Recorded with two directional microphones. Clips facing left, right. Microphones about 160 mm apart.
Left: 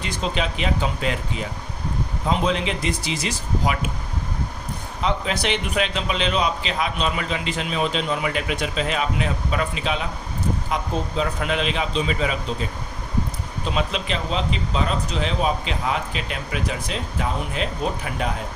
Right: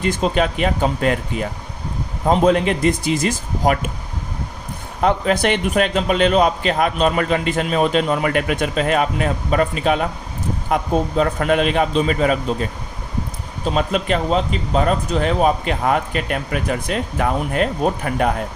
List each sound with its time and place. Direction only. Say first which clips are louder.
0.0 s a man's voice: right 7 dB; 50° right (ahead or behind)
4.9 s a man's voice: right 7 dB; 50° right (ahead or behind)
13.7 s a man's voice: right 6 dB; 45° right (ahead or behind)